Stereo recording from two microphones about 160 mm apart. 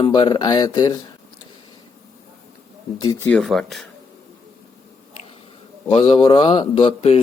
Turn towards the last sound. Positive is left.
turn(degrees=40)  # may be behind; listen again after turning